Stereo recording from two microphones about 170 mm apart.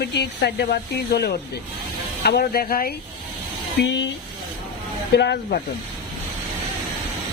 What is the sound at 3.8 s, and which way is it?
Speech, 90° left.